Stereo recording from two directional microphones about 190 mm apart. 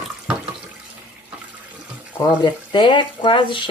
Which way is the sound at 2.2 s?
25° left (ahead or behind).